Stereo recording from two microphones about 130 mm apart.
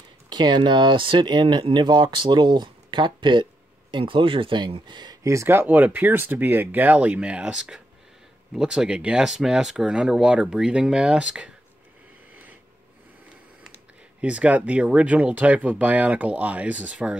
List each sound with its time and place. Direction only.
0.3 s speech: 35° right (ahead or behind)
5.3 s speech: 20° right (ahead or behind)
14.2 s speech: 10° right (ahead or behind)